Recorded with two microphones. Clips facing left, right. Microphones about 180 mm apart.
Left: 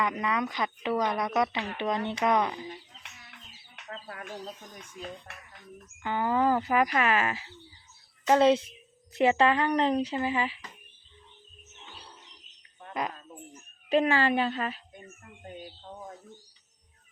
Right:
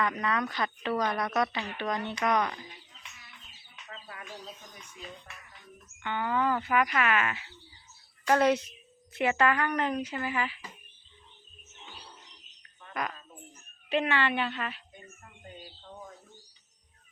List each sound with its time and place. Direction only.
0.0 s speech: 15° left (ahead or behind)
3.8 s bird: 40° left (ahead or behind)
6.0 s speech: 35° left (ahead or behind)
8.2 s speech: 20° left (ahead or behind)
12.9 s a woman's voice: 25° left (ahead or behind)
13.9 s speech: 40° left (ahead or behind)
15.4 s speech: 50° left (ahead or behind)